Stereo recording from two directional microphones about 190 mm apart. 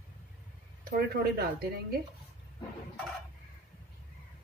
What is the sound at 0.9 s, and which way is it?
Speech, 55° right (ahead or behind).